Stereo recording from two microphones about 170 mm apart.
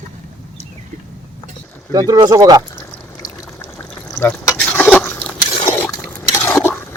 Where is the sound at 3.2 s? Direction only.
20° left (ahead or behind).